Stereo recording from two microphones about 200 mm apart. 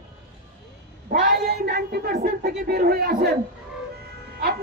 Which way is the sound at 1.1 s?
50° right (ahead or behind).